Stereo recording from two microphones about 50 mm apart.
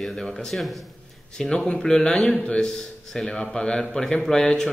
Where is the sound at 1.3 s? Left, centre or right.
Centre.